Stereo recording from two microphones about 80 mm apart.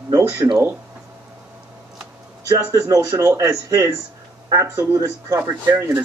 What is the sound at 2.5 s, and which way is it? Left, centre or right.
Speech, right.